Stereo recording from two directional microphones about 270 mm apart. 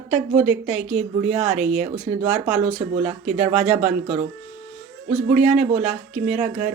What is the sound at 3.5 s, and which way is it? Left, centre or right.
Speech, centre.